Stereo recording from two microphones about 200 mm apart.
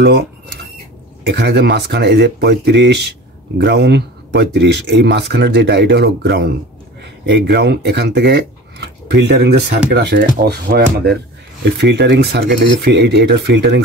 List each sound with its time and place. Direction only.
0.0 s speech: 50° right (ahead or behind)